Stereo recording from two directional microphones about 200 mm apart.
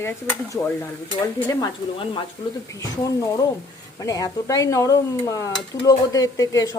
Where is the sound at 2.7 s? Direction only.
15° left (ahead or behind).